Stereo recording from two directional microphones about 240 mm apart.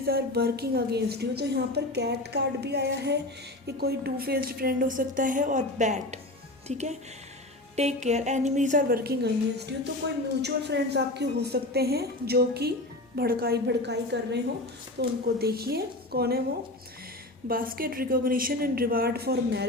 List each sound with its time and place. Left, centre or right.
0.0 s a woman's voice: right
17.5 s a woman's voice: right